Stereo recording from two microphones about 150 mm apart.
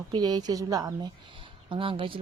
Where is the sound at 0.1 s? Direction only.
25° right (ahead or behind).